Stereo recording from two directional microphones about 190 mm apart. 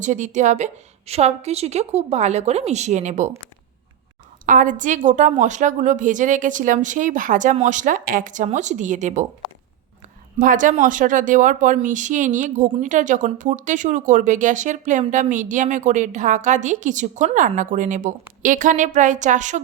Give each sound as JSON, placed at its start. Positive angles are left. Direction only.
{"t": 0.0, "sound": "speech", "side_deg": -40}
{"t": 4.4, "sound": "speech", "side_deg": -45}
{"t": 10.3, "sound": "speech", "side_deg": -45}